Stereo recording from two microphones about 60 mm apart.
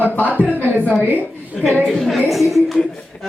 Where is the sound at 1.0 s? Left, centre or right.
Right.